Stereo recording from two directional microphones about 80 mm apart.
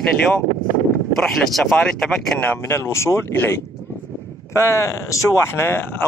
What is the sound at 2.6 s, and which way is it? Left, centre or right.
Speech, left.